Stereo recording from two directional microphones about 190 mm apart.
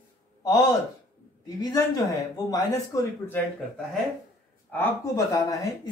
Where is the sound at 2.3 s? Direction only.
20° left (ahead or behind).